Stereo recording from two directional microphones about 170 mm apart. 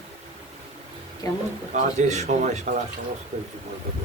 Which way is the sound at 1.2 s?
20° left (ahead or behind).